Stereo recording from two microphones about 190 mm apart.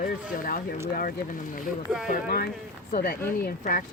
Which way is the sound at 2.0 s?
50° left (ahead or behind).